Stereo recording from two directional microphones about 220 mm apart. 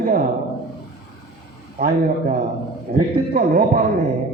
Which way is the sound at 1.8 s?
35° right (ahead or behind).